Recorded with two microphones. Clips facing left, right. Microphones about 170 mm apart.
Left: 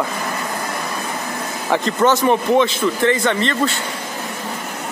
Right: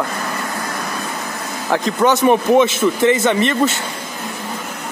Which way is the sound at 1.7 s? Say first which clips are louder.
Right 1 dB; 5° right (ahead or behind).